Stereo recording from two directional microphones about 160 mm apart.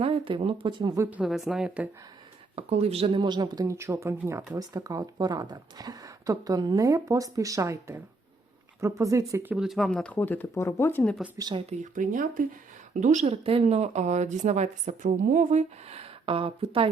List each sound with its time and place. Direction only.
0.0 s speech: 35° right (ahead or behind)
1.1 s speech: 5° right (ahead or behind)
2.6 s speech: 40° right (ahead or behind); by 11.1 s 15° left (ahead or behind)
11.3 s speech: 25° right (ahead or behind)
11.8 s speech: 55° right (ahead or behind)
12.9 s speech: 50° right (ahead or behind)